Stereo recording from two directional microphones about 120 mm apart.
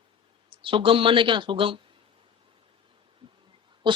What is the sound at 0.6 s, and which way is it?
Speech, 45° right (ahead or behind).